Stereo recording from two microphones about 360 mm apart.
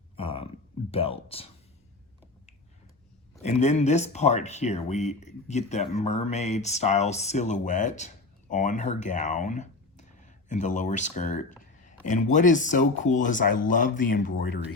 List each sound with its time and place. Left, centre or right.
0.2 s a sound: centre
0.9 s speech: centre
3.3 s speech: centre